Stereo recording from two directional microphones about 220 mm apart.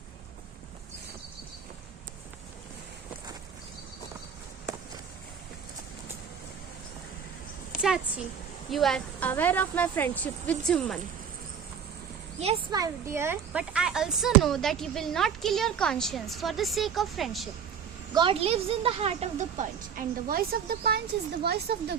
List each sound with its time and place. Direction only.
7.7 s a sound: centre (ahead or behind)
8.7 s speech: centre (ahead or behind)
12.4 s a woman's voice: 25° right (ahead or behind)
12.7 s speech: 15° right (ahead or behind)
18.1 s a woman's voice: 20° right (ahead or behind); by 21.9 s 45° right (ahead or behind)